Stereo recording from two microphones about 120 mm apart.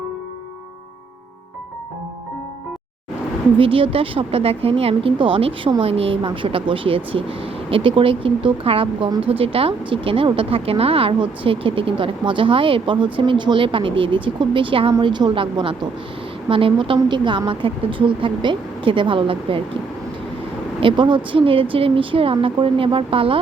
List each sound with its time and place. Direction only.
3.6 s a woman's voice: 50° right (ahead or behind)
20.8 s a woman's voice: 40° right (ahead or behind)